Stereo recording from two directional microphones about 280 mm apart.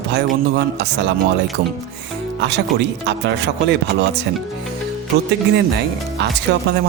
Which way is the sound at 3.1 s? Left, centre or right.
Right.